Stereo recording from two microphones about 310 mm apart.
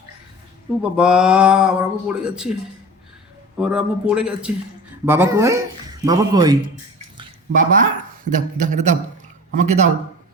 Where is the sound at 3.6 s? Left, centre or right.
Centre.